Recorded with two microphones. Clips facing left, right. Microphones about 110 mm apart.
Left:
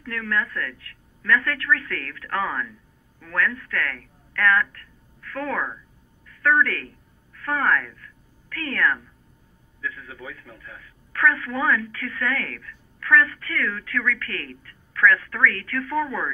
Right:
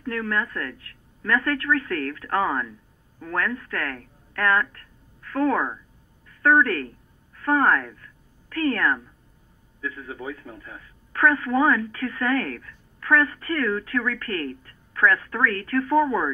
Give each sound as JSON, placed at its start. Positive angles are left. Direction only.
{"t": 0.0, "sound": "a woman's voice", "side_deg": -30}